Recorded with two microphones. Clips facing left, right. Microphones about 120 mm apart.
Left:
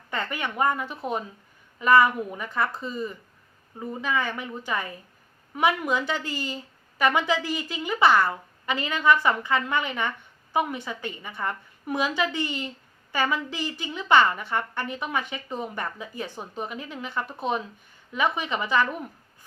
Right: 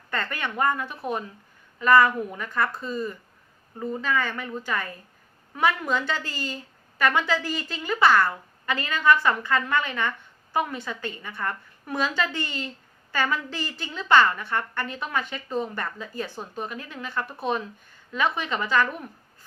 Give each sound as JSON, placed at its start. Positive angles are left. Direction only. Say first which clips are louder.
{"t": 0.1, "sound": "a woman's voice", "louder": "even", "side_deg": 15}